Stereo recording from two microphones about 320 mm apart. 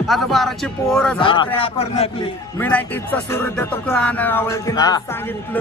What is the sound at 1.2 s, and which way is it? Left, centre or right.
Speech, centre.